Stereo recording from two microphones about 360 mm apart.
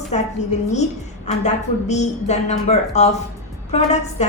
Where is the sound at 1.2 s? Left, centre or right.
Centre.